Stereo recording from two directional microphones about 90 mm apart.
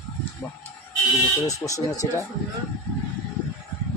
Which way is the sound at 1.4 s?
35° left (ahead or behind).